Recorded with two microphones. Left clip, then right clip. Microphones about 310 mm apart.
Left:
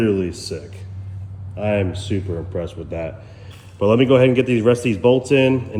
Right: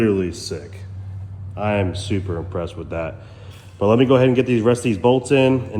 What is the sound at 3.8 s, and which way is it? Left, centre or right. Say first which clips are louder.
A man's voice: left 1 dB; centre.